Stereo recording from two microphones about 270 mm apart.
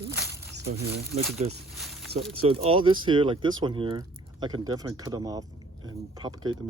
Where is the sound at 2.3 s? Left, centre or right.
Right.